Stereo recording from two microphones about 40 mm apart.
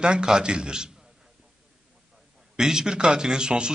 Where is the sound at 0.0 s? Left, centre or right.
Right.